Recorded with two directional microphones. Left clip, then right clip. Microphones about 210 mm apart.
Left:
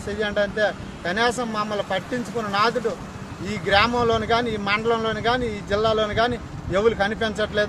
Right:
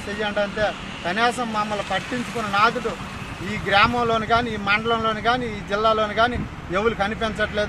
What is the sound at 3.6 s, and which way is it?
Speech, 25° left (ahead or behind).